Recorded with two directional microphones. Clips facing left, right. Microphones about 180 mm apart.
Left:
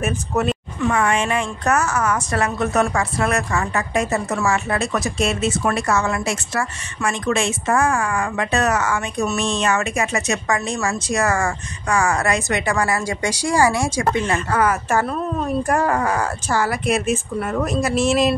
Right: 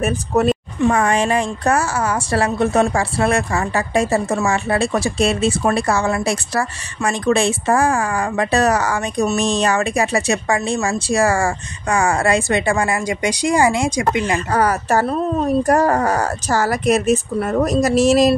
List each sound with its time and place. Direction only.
0.0 s speech: 35° right (ahead or behind); by 14.4 s 15° right (ahead or behind)
14.5 s speech: 35° right (ahead or behind)